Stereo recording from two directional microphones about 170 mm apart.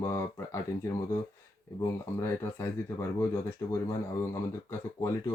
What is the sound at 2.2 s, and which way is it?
Speech, 15° left (ahead or behind).